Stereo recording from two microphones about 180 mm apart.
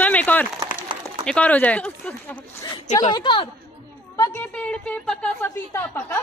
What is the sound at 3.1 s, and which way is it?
Speech, 25° left (ahead or behind).